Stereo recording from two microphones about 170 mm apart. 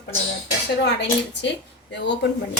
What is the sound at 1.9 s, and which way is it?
Speech, 90° left.